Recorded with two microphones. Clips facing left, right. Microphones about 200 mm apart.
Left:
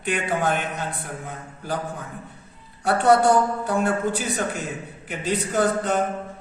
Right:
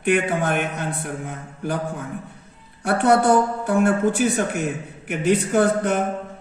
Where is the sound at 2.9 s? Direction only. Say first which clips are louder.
Right 1 dB; 55° right (ahead or behind).